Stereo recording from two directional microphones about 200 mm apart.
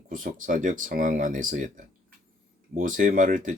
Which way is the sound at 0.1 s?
40° right (ahead or behind).